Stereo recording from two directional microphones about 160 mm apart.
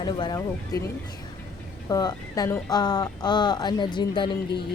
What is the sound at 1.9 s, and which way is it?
Speech, 25° left (ahead or behind).